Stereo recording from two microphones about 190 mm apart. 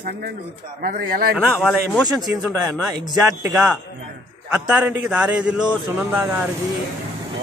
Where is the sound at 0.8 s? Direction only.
50° right (ahead or behind).